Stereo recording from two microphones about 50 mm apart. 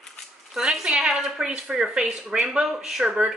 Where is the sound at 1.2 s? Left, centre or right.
Centre.